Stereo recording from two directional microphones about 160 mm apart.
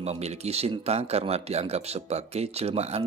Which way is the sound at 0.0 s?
40° right (ahead or behind).